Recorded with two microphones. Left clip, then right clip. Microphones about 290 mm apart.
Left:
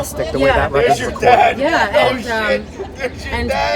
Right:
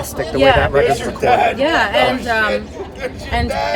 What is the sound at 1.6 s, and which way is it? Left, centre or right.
Speech, centre.